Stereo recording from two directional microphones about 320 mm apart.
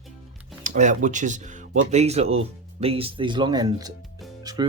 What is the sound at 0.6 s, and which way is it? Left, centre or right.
Speech, right.